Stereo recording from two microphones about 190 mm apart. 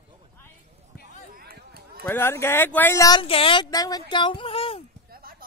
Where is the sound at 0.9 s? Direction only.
55° left (ahead or behind).